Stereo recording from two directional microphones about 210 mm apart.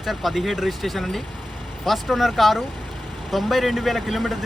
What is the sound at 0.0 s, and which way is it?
Speech, centre (ahead or behind).